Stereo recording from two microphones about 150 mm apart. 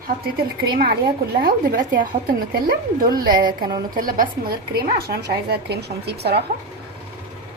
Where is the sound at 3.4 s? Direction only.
30° right (ahead or behind).